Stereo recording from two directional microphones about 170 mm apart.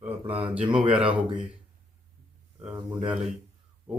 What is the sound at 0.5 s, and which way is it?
Speech, 5° right (ahead or behind).